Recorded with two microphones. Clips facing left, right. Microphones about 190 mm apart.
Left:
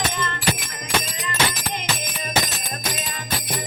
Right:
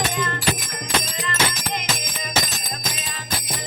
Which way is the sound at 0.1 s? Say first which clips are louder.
Right 2 dB; 10° right (ahead or behind).